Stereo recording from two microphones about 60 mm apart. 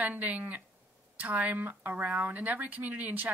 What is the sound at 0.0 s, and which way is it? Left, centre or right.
Speech, right.